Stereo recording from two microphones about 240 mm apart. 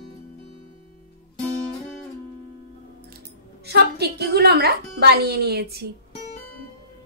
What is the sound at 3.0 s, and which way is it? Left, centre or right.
Speech, right.